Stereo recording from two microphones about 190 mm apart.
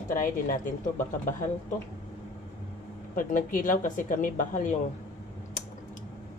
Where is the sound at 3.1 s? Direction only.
45° left (ahead or behind).